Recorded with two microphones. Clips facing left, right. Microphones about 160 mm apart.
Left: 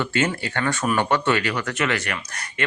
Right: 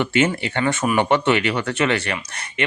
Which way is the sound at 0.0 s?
20° right (ahead or behind).